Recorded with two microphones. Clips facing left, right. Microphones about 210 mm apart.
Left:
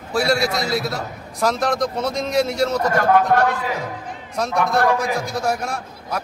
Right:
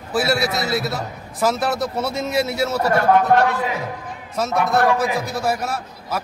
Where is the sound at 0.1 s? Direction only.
5° right (ahead or behind).